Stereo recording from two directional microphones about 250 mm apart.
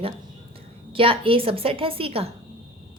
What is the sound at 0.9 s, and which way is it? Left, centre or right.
A woman's voice, right.